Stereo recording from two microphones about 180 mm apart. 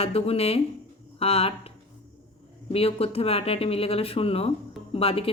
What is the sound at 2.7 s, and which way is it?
Speech, 35° left (ahead or behind).